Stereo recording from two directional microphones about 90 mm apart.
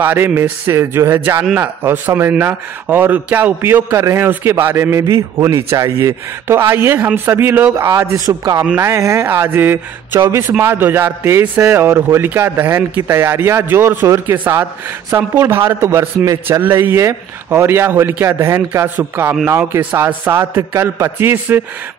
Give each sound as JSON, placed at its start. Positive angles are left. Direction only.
{"t": 0.0, "sound": "a man's voice", "side_deg": -20}
{"t": 8.7, "sound": "a man's voice", "side_deg": -30}